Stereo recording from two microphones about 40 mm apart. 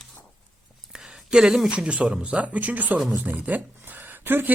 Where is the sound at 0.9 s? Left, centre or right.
Right.